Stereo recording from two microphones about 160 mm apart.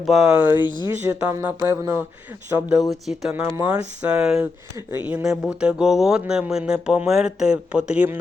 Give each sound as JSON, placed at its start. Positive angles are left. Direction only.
{"t": 0.0, "sound": "speech", "side_deg": -5}
{"t": 3.1, "sound": "speech", "side_deg": -5}